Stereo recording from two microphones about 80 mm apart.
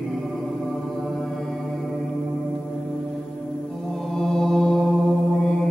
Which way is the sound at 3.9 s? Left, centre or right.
Centre.